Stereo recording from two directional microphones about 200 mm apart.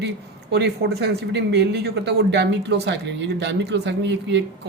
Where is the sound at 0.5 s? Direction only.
55° right (ahead or behind).